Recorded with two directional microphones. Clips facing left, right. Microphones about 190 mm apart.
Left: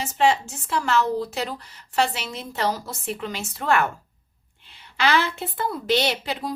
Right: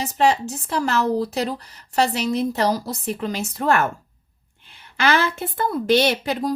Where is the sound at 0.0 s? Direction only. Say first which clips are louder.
Right 2 dB; 35° right (ahead or behind).